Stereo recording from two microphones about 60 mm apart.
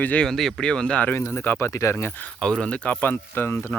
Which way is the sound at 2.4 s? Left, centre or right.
Centre.